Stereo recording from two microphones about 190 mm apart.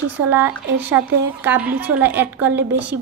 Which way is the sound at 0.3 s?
10° right (ahead or behind).